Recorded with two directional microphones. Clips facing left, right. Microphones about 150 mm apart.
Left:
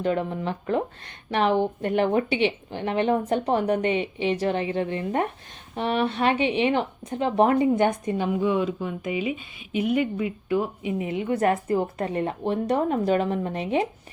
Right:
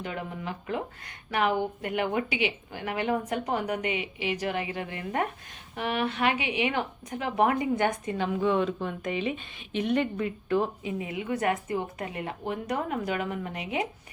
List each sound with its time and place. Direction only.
0.0 s a woman's voice: 40° left (ahead or behind); by 10.7 s 10° left (ahead or behind)
10.8 s a woman's voice: 25° left (ahead or behind)